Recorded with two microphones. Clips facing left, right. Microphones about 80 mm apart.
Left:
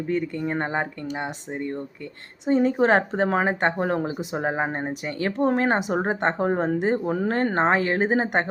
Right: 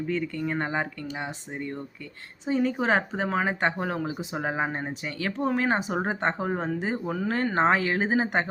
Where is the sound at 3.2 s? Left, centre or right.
Left.